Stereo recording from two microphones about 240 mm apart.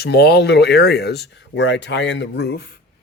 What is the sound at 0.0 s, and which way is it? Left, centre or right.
Speech, left.